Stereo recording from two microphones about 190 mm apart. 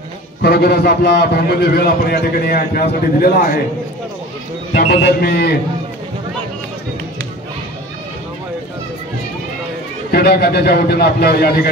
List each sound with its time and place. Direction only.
0.4 s a man's voice: 60° left (ahead or behind)
4.7 s a man's voice: 55° left (ahead or behind)
10.1 s a man's voice: 55° left (ahead or behind)